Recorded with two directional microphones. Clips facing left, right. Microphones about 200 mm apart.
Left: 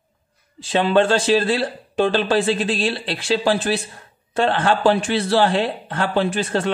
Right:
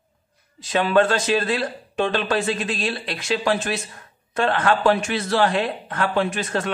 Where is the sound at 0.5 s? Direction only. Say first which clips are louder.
Left 1 dB; 30° left (ahead or behind).